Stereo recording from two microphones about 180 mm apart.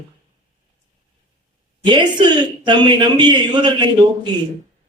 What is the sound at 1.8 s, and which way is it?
A man's voice, 25° right (ahead or behind).